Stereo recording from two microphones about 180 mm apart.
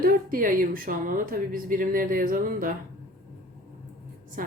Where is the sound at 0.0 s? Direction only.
50° right (ahead or behind).